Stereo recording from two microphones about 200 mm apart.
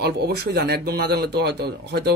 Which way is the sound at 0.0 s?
55° right (ahead or behind).